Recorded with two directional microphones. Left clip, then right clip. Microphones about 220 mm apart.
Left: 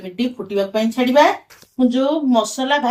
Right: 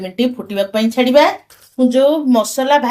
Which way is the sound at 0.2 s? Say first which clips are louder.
Right 3 dB; 55° right (ahead or behind).